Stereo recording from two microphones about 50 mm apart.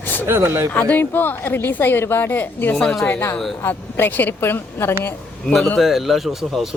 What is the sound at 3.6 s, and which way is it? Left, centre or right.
A woman's voice, left.